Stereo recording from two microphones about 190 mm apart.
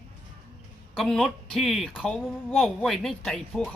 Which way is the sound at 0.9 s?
Centre (ahead or behind).